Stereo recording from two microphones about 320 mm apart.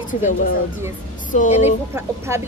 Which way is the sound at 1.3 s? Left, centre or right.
Left.